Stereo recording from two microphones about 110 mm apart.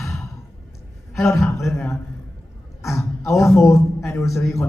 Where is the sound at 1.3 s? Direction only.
25° left (ahead or behind).